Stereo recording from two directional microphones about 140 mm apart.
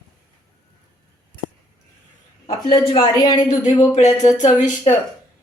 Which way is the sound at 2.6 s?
35° left (ahead or behind).